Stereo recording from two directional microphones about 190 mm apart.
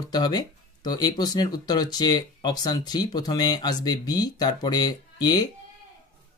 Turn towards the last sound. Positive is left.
turn(degrees=20)  # may be behind; listen again after turning